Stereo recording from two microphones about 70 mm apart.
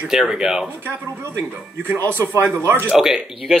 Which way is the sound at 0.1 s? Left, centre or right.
Centre.